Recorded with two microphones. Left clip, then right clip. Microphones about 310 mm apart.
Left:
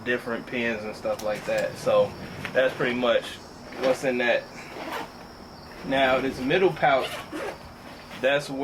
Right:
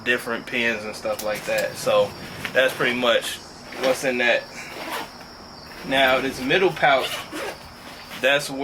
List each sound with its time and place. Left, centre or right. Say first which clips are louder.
0.0 s speech: right 5 dB; centre
3.8 s a sound: right 3 dB; centre
5.9 s speech: right 3 dB; centre